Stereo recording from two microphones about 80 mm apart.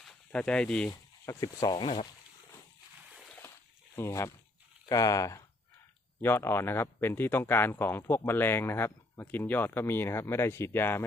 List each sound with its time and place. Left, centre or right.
0.3 s speech: centre
0.9 s speech: left
1.6 s speech: left
3.9 s speech: left
4.9 s speech: left
6.2 s speech: left